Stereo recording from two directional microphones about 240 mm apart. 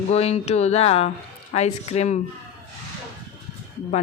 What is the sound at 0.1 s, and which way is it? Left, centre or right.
Speech, left.